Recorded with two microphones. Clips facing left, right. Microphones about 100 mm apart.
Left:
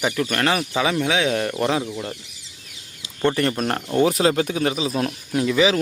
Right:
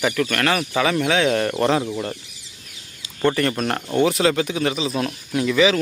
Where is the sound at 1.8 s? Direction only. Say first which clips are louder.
Right 3 dB; 10° right (ahead or behind).